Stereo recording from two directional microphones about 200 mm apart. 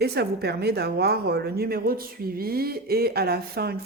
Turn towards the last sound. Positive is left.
turn(degrees=-50)  # may be behind; listen again after turning